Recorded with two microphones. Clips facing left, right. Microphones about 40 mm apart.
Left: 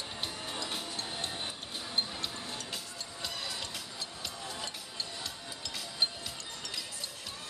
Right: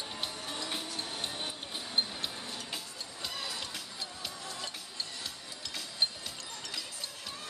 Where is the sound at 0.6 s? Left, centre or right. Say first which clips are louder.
Right 1 dB; centre.